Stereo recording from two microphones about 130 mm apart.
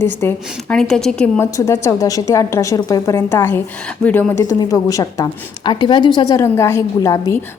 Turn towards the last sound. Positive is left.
turn(degrees=25)  # may be behind; listen again after turning